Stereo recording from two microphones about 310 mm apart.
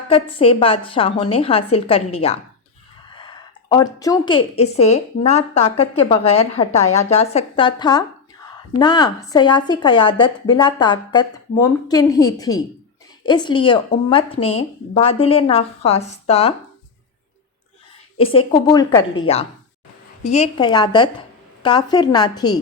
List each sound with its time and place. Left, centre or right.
0.1 s a woman's voice: centre
3.2 s a woman's voice: centre
18.2 s a woman's voice: centre